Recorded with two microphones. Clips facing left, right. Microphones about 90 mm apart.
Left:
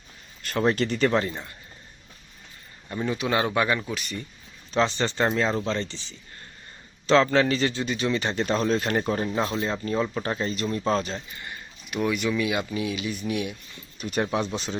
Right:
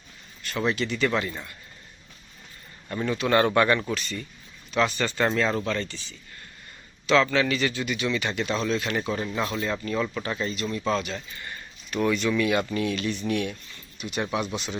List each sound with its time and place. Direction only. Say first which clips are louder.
0.4 s speech: left 3 dB; 45° left (ahead or behind)
2.9 s speech: right 2 dB; 15° left (ahead or behind)
4.0 s speech: even; 20° left (ahead or behind)
7.1 s speech: left 2 dB; 35° left (ahead or behind)
11.3 s speech: even; 20° left (ahead or behind)
14.0 s speech: left 2 dB; 40° left (ahead or behind)